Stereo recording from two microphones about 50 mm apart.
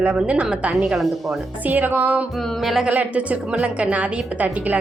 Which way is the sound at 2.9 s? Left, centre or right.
Right.